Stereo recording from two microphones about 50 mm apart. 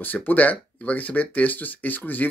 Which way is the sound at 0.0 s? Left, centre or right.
Left.